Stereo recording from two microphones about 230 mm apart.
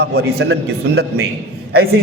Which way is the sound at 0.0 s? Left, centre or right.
Right.